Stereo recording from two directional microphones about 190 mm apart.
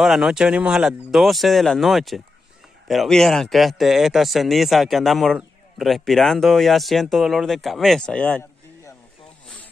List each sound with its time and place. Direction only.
0.0 s speech: 5° right (ahead or behind)